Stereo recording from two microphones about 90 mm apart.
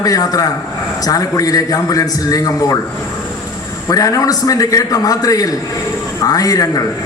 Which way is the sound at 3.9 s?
40° left (ahead or behind).